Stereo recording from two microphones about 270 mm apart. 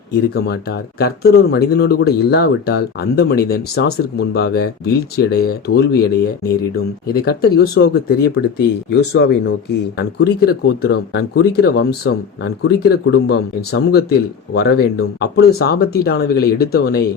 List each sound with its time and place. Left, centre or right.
0.3 s speech: left
7.1 s speech: left